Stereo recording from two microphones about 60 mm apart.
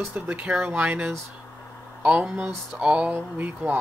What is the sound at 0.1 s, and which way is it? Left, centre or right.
Speech, right.